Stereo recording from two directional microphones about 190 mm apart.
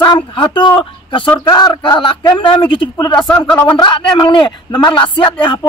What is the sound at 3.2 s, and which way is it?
Speech, 5° left (ahead or behind).